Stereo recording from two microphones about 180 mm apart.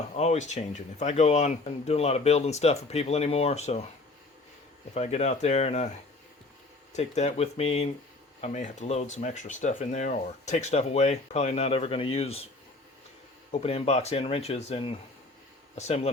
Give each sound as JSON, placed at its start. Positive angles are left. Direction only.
{"t": 0.2, "sound": "speech", "side_deg": 40}
{"t": 4.9, "sound": "speech", "side_deg": 35}
{"t": 6.9, "sound": "speech", "side_deg": 40}
{"t": 13.5, "sound": "speech", "side_deg": 35}